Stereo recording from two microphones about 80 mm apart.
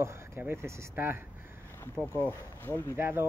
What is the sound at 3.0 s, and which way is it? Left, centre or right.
Speech, right.